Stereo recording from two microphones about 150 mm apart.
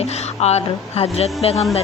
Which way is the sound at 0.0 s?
45° left (ahead or behind).